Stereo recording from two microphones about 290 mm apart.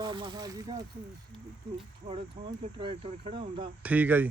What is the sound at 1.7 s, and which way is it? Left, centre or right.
Speech, centre.